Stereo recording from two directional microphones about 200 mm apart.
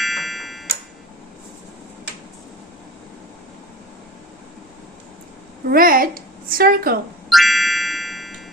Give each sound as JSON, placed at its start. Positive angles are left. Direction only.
{"t": 0.0, "sound": "tick-tock", "side_deg": 0}
{"t": 5.6, "sound": "a woman's voice", "side_deg": -45}
{"t": 7.3, "sound": "music", "side_deg": 0}